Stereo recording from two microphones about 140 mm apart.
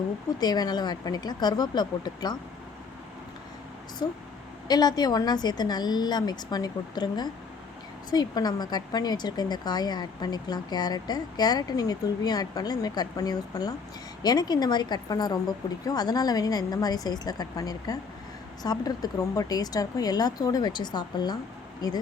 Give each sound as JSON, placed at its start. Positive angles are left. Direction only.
{"t": 0.3, "sound": "speech", "side_deg": 30}
{"t": 4.0, "sound": "speech", "side_deg": 30}